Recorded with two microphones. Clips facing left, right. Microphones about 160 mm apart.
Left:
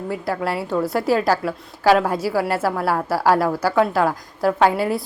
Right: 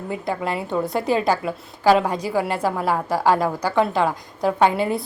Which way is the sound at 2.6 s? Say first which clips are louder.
Left 1 dB; 15° right (ahead or behind).